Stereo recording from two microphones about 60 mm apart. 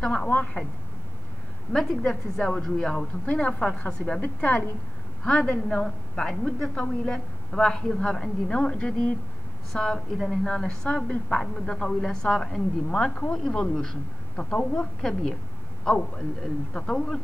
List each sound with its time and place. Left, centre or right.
0.0 s a woman's voice: centre
1.7 s a woman's voice: centre
3.3 s a woman's voice: centre
5.4 s a woman's voice: centre
16.7 s a woman's voice: centre